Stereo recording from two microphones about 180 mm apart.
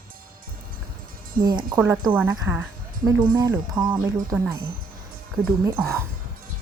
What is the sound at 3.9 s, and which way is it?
Wind chime, 10° right (ahead or behind).